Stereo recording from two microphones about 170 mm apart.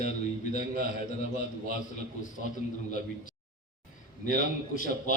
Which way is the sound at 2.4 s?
65° right (ahead or behind).